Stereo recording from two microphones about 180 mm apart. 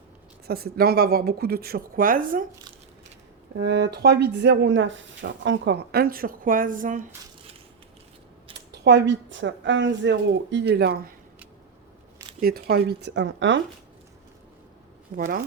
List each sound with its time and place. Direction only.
0.4 s speech: 60° right (ahead or behind)
3.6 s speech: 70° right (ahead or behind); by 7.1 s 45° right (ahead or behind)
8.8 s speech: 75° right (ahead or behind)
12.4 s speech: 60° right (ahead or behind); by 13.6 s 85° right
15.1 s speech: 50° right (ahead or behind)